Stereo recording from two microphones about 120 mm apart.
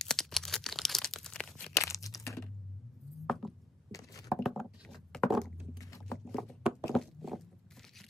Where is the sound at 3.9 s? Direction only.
30° left (ahead or behind).